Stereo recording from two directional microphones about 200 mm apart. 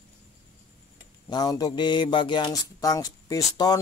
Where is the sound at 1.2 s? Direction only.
20° left (ahead or behind).